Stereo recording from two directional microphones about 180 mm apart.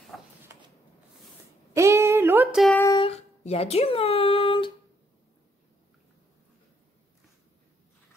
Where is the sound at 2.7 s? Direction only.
20° left (ahead or behind).